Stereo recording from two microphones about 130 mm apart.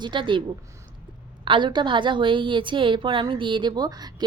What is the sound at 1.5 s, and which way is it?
A woman's voice, 35° right (ahead or behind).